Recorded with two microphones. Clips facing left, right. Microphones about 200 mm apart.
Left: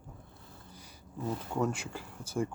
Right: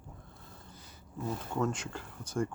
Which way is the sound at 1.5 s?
10° left (ahead or behind).